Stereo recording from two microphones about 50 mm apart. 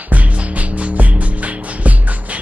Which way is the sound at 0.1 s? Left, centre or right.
Right.